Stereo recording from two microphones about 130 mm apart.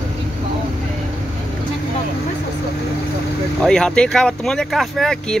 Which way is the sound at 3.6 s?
5° left (ahead or behind).